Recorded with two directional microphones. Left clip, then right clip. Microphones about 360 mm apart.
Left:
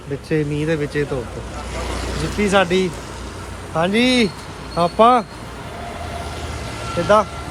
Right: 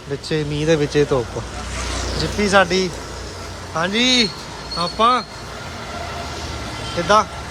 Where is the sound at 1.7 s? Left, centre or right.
Centre.